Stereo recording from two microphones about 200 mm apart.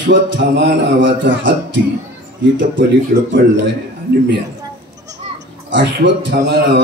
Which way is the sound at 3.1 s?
40° right (ahead or behind).